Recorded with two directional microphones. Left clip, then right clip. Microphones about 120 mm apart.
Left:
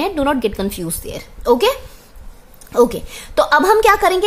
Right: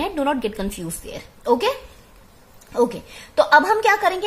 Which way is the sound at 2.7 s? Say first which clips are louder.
Left 6 dB; 45° left (ahead or behind).